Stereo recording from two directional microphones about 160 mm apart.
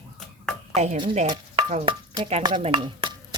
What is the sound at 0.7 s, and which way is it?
Speech, 45° right (ahead or behind).